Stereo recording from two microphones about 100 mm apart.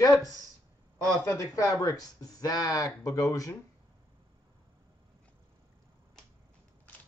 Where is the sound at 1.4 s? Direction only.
30° left (ahead or behind).